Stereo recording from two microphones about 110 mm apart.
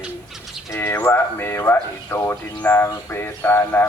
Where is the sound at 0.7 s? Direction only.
20° left (ahead or behind).